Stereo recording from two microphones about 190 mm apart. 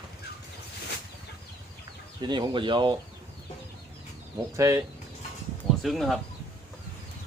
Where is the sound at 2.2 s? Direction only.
25° right (ahead or behind).